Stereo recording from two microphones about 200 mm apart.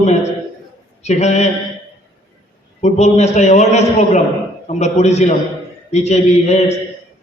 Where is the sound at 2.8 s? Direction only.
35° left (ahead or behind).